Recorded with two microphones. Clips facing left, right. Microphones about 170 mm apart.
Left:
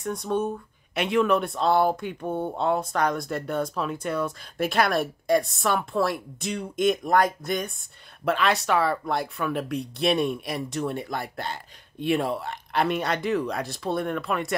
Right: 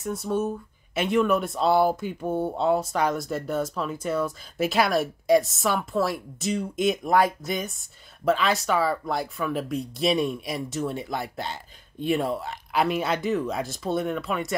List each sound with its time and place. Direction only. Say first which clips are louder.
0.0 s speech: even; 5° right (ahead or behind)
11.1 s speech: even; 55° left (ahead or behind)
12.0 s speech: even; centre (ahead or behind)